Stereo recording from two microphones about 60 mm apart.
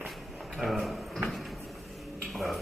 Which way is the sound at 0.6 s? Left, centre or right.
Centre.